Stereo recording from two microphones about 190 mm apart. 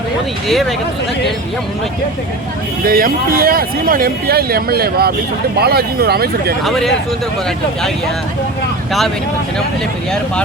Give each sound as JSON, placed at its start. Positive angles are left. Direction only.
{"t": 2.8, "sound": "speech", "side_deg": -50}
{"t": 6.7, "sound": "speech", "side_deg": 0}